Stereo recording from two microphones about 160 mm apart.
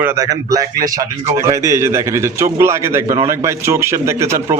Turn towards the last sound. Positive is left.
turn(degrees=-15)  # may be behind; listen again after turning